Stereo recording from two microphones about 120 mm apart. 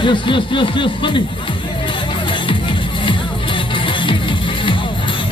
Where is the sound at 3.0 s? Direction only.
45° left (ahead or behind).